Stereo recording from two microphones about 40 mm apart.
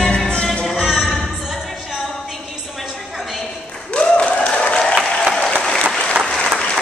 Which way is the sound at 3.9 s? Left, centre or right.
Left.